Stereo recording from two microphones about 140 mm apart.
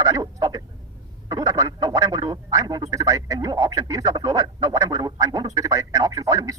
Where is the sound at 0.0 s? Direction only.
25° right (ahead or behind).